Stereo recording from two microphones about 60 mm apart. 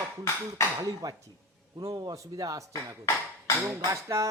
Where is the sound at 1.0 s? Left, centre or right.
Right.